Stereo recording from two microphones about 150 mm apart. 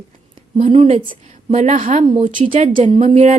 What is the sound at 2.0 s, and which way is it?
Speech, 40° right (ahead or behind).